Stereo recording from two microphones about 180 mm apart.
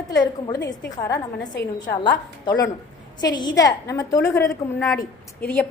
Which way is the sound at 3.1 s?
25° left (ahead or behind).